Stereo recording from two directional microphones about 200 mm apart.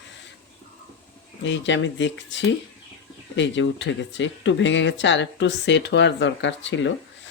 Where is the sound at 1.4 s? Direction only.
65° left (ahead or behind).